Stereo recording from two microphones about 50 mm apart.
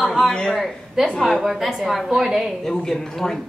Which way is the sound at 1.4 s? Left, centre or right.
Centre.